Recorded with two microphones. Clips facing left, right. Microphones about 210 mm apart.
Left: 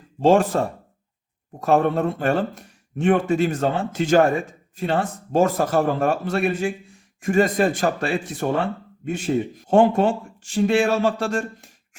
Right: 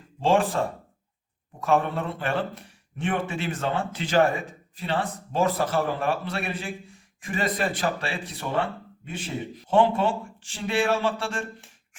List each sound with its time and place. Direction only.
0.2 s speech: 40° left (ahead or behind)
1.6 s speech: 40° left (ahead or behind)